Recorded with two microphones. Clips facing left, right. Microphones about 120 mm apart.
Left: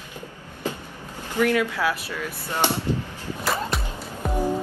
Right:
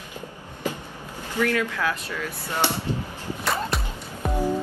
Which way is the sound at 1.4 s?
15° left (ahead or behind).